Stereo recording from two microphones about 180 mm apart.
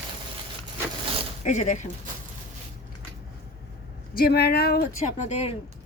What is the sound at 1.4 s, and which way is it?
Speech, 45° left (ahead or behind).